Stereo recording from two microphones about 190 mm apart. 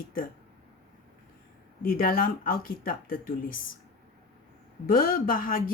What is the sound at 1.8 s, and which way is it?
Speech, 45° left (ahead or behind).